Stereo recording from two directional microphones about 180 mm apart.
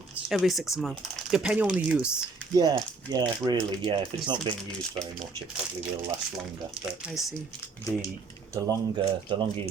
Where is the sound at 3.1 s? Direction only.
25° right (ahead or behind).